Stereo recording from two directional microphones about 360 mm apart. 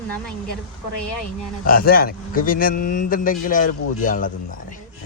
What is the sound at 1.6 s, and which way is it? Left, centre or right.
Speech, left.